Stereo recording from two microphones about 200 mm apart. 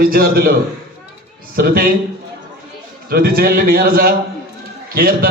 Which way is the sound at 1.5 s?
45° right (ahead or behind).